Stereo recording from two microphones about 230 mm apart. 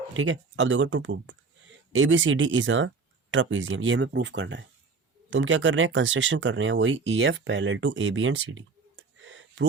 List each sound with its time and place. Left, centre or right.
0.1 s speech: right